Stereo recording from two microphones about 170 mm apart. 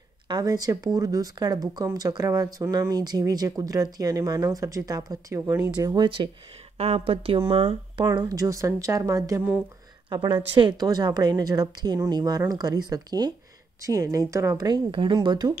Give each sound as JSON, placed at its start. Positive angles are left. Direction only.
{"t": 0.3, "sound": "speech", "side_deg": -20}